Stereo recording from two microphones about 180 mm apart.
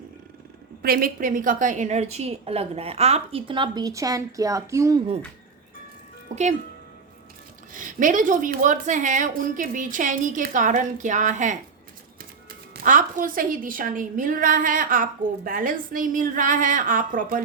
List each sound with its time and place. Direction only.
0.8 s a woman's voice: 55° right (ahead or behind); by 5.0 s 20° right (ahead or behind)
6.3 s a woman's voice: 40° right (ahead or behind)
7.7 s a woman's voice: 45° right (ahead or behind)